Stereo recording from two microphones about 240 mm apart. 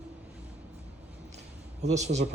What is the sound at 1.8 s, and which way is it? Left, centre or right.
Speech, right.